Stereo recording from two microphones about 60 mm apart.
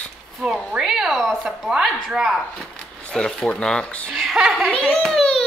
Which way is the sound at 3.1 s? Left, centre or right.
Centre.